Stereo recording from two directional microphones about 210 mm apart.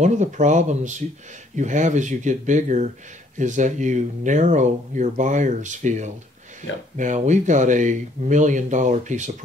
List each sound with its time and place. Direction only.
0.0 s speech: 35° right (ahead or behind)